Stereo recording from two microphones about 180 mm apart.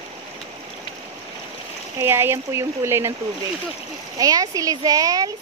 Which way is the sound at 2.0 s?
15° right (ahead or behind).